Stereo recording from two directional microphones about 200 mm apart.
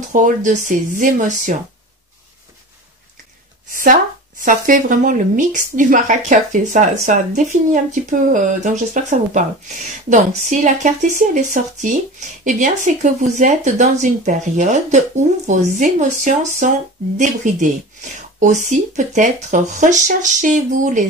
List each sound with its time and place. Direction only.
0.1 s speech: 40° right (ahead or behind)
3.7 s speech: 40° right (ahead or behind)
18.7 s speech: 40° right (ahead or behind)